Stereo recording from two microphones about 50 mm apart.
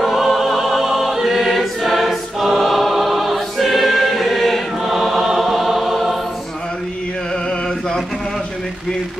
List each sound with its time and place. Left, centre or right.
0.0 s choir: centre